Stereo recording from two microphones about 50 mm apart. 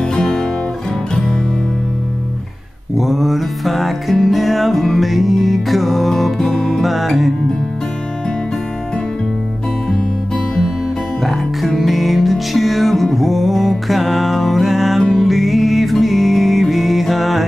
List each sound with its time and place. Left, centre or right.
0.0 s music: centre
3.0 s music: centre
6.8 s music: centre
9.8 s music: centre
11.2 s music: centre